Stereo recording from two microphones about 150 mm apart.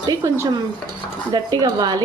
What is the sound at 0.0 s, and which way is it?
A woman's voice, 25° right (ahead or behind).